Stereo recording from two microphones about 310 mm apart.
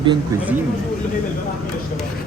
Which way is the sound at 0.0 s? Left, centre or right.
Centre.